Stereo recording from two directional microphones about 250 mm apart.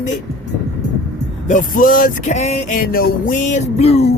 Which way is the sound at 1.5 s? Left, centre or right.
Left.